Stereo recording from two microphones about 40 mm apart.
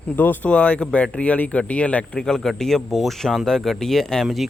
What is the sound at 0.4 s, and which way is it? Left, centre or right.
Speech, left.